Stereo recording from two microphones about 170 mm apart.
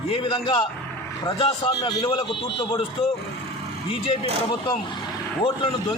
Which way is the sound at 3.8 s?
30° left (ahead or behind).